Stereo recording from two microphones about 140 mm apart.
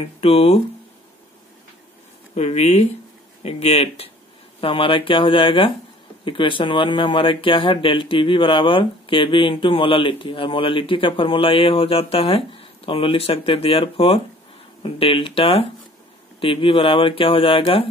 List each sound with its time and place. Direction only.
0.2 s speech: 45° left (ahead or behind)
2.3 s speech: 50° left (ahead or behind)